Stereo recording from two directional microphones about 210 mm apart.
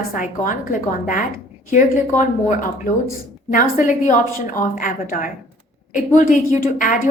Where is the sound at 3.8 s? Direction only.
35° left (ahead or behind).